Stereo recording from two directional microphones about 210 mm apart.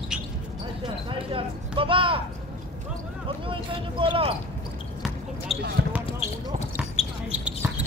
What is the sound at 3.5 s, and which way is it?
Speech, 25° right (ahead or behind).